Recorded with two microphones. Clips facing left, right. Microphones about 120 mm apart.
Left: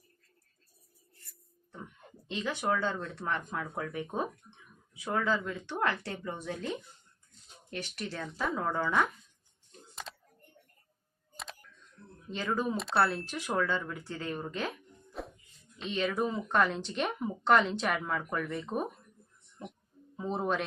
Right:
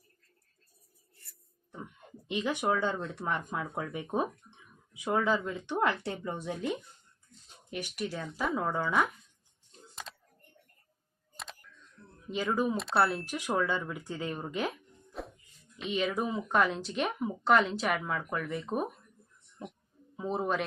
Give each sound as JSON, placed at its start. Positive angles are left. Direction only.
{"t": 2.2, "sound": "speech", "side_deg": -15}
{"t": 9.9, "sound": "typing", "side_deg": 0}
{"t": 12.3, "sound": "speech", "side_deg": -10}
{"t": 15.1, "sound": "music", "side_deg": 0}
{"t": 15.9, "sound": "speech", "side_deg": -5}
{"t": 20.1, "sound": "speech", "side_deg": -5}